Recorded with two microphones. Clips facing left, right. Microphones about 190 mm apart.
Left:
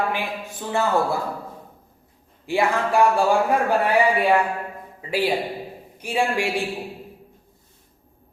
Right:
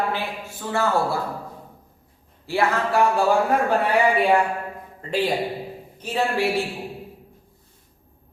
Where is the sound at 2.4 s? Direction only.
15° left (ahead or behind).